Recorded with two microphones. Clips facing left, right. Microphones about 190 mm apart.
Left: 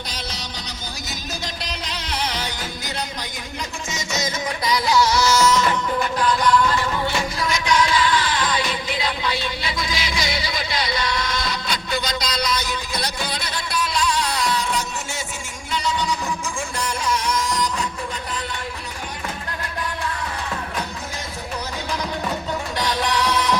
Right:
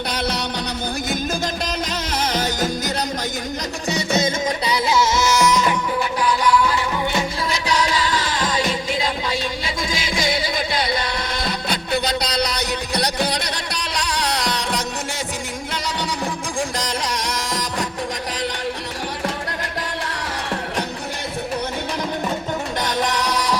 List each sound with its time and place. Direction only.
0.1 s music: 60° right (ahead or behind)
1.6 s music: 45° right (ahead or behind)
3.8 s music: 35° right (ahead or behind); by 6.7 s 10° right (ahead or behind)
7.5 s music: 35° right (ahead or behind); by 14.6 s 70° right (ahead or behind)
17.2 s music: 85° right
22.8 s music: 45° right (ahead or behind)